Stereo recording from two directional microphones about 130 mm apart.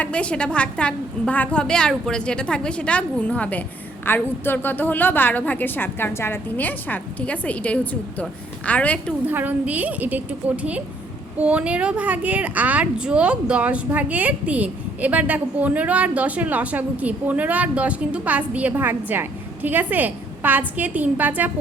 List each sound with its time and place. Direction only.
0.0 s a woman's voice: 10° left (ahead or behind)
9.2 s a woman's voice: 15° right (ahead or behind)